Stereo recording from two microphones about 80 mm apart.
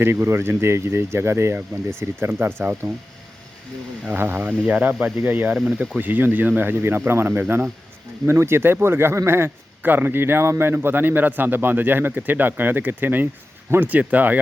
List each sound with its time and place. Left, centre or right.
0.0 s speech: right
2.8 s speech: right
4.2 s a man's voice: right
5.5 s speech: centre
5.9 s a man's voice: right